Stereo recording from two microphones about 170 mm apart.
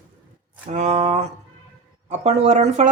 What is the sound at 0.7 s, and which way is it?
Speech, 40° right (ahead or behind).